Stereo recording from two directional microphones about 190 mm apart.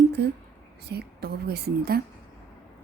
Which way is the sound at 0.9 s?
60° right (ahead or behind).